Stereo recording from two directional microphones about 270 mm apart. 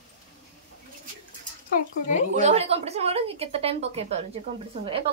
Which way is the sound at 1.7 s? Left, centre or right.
Left.